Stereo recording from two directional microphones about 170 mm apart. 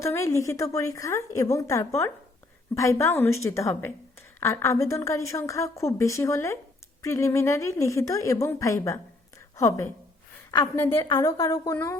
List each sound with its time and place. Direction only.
0.0 s a woman's voice: 15° left (ahead or behind)